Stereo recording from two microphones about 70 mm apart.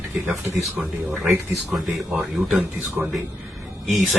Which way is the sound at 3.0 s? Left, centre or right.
Right.